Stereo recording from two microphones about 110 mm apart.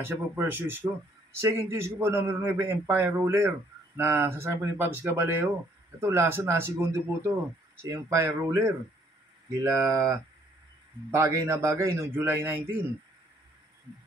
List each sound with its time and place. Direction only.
0.0 s a man's voice: 20° right (ahead or behind)